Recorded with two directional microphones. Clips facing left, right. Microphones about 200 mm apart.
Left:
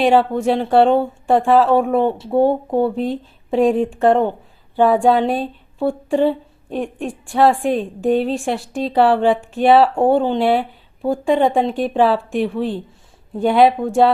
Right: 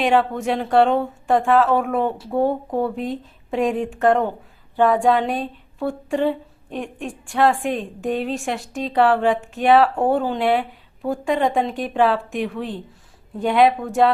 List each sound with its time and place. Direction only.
0.0 s speech: 35° left (ahead or behind)